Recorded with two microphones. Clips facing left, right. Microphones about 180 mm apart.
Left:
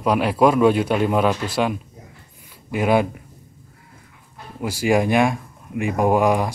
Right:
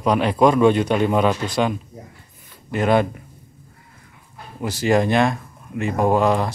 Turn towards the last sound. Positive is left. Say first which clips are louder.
# even
turn(degrees=15)  # may be behind; listen again after turning